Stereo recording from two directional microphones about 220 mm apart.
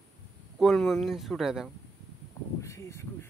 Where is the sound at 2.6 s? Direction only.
15° left (ahead or behind).